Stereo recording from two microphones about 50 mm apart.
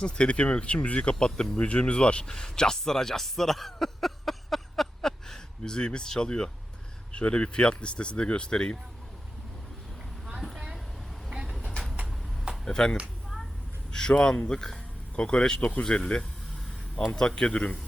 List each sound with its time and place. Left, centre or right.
0.0 s speech: left
10.4 s vehicle: centre
11.3 s vehicle: centre
12.6 s speech: centre